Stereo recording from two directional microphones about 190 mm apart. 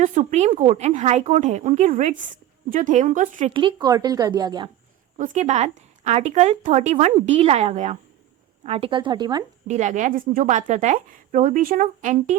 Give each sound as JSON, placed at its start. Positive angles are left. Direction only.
{"t": 0.0, "sound": "speech", "side_deg": -40}
{"t": 3.5, "sound": "speech", "side_deg": -25}
{"t": 5.1, "sound": "speech", "side_deg": -40}
{"t": 9.6, "sound": "speech", "side_deg": -40}